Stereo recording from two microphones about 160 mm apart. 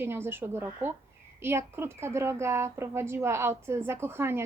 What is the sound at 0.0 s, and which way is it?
A woman's voice, 15° right (ahead or behind).